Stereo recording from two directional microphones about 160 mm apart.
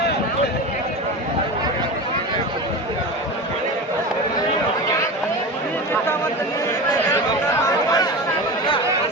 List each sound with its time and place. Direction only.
7.5 s chatter: 25° left (ahead or behind)